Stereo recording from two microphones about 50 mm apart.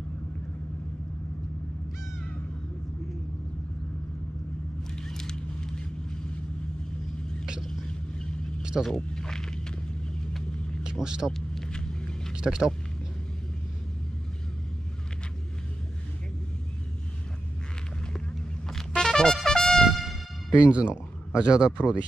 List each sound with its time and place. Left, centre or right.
4.9 s vehicle: centre
8.9 s a sound: centre
10.8 s speech: centre
11.3 s vehicle: centre
12.4 s speech: centre
18.7 s music: centre
20.6 s speech: right